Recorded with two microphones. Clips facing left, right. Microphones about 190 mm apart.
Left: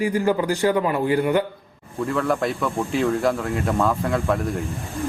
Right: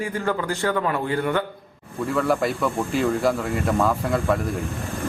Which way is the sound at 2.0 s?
5° right (ahead or behind).